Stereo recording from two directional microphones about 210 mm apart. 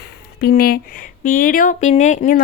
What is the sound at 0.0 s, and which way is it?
Speech, 50° left (ahead or behind).